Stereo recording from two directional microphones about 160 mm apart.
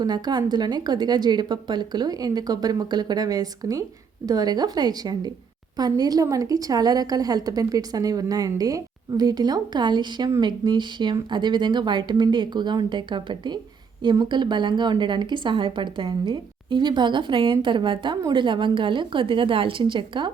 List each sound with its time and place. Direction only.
0.0 s a woman's voice: 25° right (ahead or behind)